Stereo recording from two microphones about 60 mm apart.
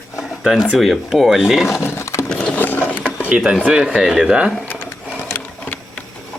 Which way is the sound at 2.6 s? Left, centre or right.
Left.